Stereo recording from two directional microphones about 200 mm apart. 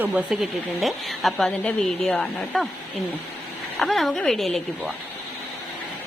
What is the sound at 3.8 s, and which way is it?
A woman's voice, centre (ahead or behind).